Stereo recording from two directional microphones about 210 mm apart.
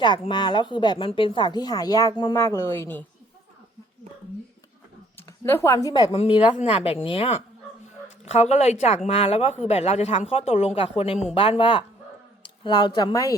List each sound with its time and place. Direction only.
0.3 s speech: 20° left (ahead or behind)
5.4 s a woman's voice: 10° left (ahead or behind)